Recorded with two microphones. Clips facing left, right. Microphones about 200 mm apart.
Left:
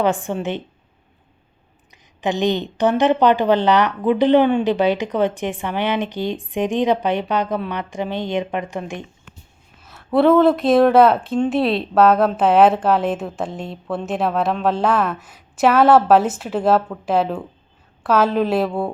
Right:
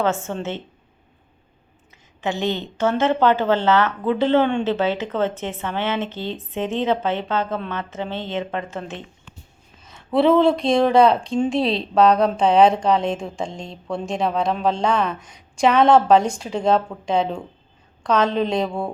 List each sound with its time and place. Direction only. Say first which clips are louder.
0.0 s a woman's voice: left 3 dB; 15° left (ahead or behind)
2.2 s a woman's voice: left 4 dB; 15° left (ahead or behind)
9.8 s a woman's voice: left 2 dB; centre (ahead or behind)